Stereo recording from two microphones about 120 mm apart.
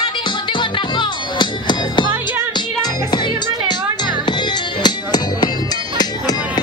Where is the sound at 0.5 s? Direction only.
40° left (ahead or behind).